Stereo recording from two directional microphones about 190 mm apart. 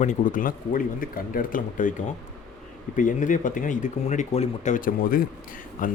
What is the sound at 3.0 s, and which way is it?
Speech, 45° left (ahead or behind).